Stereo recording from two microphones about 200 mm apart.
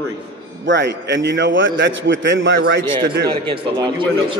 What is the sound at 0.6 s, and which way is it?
A man's voice, 60° right (ahead or behind).